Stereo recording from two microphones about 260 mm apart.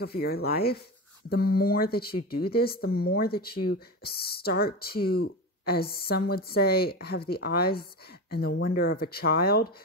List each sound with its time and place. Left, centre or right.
0.0 s speech: left